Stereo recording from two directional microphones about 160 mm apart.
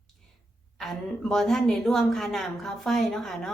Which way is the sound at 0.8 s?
Centre (ahead or behind).